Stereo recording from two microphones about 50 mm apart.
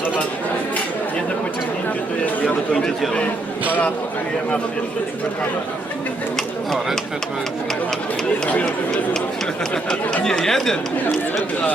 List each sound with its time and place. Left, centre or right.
2.2 s a sound: left
9.7 s speech: left
10.2 s speech: centre